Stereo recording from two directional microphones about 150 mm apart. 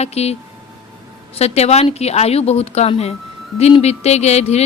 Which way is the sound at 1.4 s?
45° left (ahead or behind).